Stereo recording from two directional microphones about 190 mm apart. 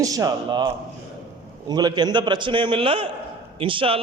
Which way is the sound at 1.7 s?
20° right (ahead or behind).